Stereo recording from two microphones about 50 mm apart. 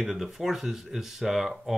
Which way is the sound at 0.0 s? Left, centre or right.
Centre.